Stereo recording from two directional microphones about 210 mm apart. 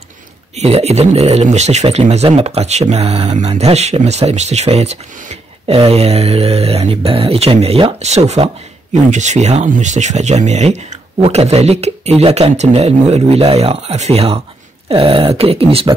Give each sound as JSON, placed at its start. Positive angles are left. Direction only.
{"t": 0.6, "sound": "speech", "side_deg": -30}